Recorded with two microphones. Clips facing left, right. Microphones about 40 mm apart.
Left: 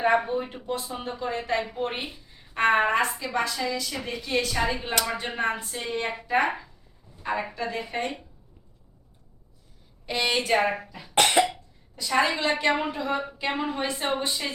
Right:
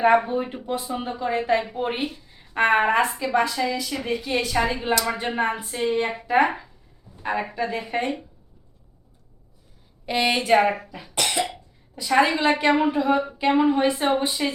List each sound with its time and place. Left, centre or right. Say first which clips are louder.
0.4 s a woman's voice: right 3 dB; centre
7.5 s a woman's voice: right 4 dB; centre
10.1 s a woman's voice: right 4 dB; centre
11.1 s cough: left 4 dB; left
11.4 s cough: left 3 dB; centre
12.0 s a woman's voice: right 5 dB; centre